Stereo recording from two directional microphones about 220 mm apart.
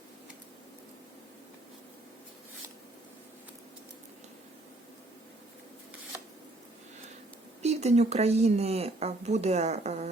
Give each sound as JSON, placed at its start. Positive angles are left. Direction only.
{"t": 7.6, "sound": "speech", "side_deg": -30}